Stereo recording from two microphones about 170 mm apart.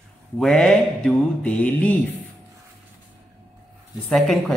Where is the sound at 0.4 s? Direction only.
Centre (ahead or behind).